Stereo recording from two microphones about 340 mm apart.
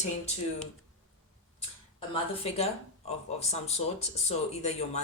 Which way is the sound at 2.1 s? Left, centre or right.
Centre.